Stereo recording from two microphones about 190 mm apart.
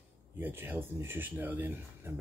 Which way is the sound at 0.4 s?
10° right (ahead or behind).